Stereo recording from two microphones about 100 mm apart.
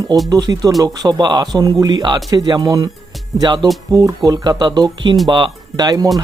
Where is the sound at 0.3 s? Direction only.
40° right (ahead or behind).